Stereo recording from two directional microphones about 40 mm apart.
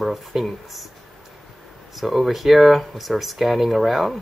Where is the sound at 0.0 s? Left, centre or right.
Centre.